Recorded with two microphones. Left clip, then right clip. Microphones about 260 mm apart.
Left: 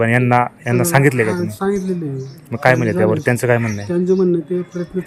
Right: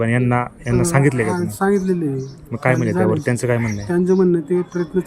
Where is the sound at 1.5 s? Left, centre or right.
Centre.